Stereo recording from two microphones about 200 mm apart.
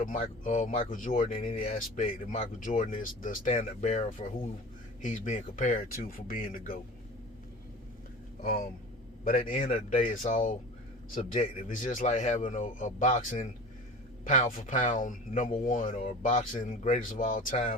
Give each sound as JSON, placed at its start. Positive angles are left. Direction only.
{"t": 0.0, "sound": "speech", "side_deg": 40}
{"t": 8.4, "sound": "speech", "side_deg": 45}